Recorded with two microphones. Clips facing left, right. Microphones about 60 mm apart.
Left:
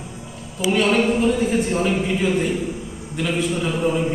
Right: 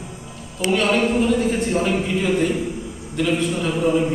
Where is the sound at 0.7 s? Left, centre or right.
Centre.